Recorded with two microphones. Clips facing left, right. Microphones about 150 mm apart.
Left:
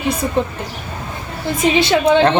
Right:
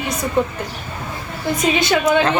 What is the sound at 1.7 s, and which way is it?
Speech, 30° left (ahead or behind).